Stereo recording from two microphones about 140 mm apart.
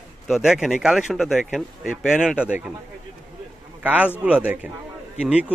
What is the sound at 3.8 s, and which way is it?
A man's voice, 10° right (ahead or behind).